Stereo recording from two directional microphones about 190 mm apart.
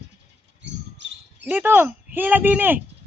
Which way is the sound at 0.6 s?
70° right (ahead or behind).